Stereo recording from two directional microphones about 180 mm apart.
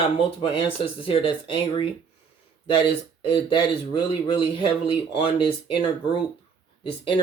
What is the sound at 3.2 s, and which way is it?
Speech, 25° left (ahead or behind).